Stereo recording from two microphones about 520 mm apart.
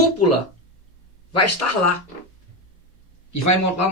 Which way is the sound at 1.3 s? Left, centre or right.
Left.